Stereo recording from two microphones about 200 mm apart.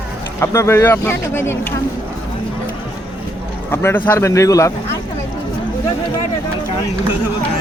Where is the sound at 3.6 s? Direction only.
10° left (ahead or behind).